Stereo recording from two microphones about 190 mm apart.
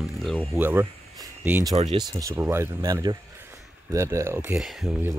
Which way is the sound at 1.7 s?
35° right (ahead or behind).